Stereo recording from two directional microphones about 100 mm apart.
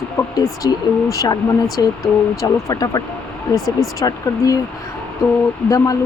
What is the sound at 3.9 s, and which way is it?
Speech, 35° left (ahead or behind).